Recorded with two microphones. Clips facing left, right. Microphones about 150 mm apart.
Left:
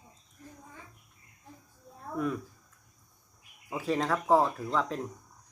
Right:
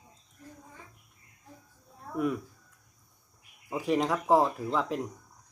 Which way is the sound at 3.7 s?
15° right (ahead or behind).